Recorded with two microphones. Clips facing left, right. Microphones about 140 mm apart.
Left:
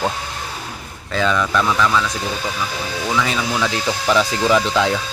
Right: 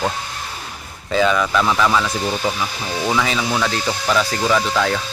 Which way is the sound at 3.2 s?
Centre (ahead or behind).